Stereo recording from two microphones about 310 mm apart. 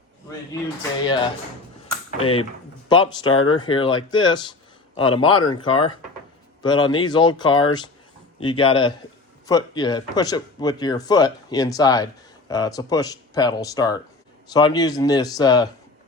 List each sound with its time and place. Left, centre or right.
1.0 s speech: centre